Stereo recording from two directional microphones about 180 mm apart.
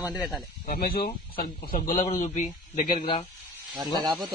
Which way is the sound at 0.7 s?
55° left (ahead or behind).